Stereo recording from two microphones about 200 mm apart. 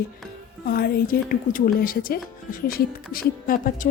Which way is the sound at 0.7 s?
50° left (ahead or behind).